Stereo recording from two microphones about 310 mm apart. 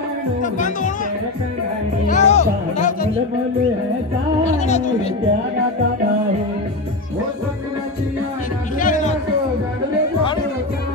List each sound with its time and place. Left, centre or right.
0.4 s speech: left
2.0 s speech: left
4.5 s speech: left
8.7 s music: left